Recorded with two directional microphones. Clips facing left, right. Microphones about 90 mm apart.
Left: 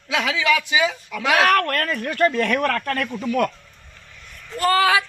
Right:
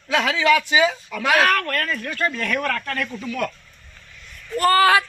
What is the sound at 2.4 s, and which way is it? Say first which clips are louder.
Speech: left 3 dB; 40° left (ahead or behind).